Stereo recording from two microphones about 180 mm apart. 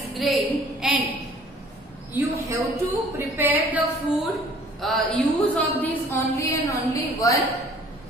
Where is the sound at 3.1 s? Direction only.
10° right (ahead or behind).